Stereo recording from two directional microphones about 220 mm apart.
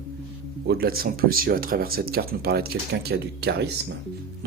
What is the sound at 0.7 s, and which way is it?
Speech, 45° right (ahead or behind).